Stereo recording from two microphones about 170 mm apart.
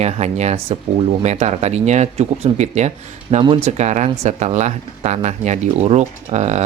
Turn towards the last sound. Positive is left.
turn(degrees=-40)  # may be behind; listen again after turning